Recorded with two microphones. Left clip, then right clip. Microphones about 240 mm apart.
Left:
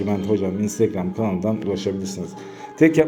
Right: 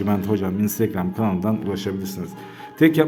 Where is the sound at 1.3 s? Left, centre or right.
Right.